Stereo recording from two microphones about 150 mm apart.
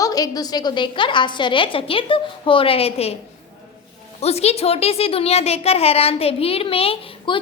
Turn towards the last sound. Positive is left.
turn(degrees=40)  # may be behind; listen again after turning